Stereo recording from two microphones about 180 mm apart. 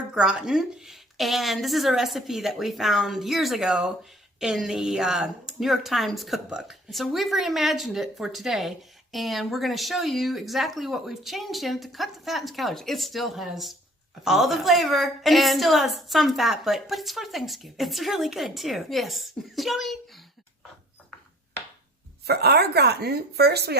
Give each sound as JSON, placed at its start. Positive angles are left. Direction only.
{"t": 0.1, "sound": "a woman's voice", "side_deg": -5}
{"t": 22.3, "sound": "speech", "side_deg": -65}